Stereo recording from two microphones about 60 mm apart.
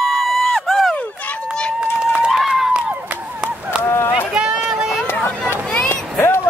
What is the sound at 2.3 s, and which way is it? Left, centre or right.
Run, centre.